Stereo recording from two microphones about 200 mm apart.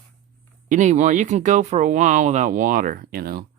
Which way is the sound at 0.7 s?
40° right (ahead or behind).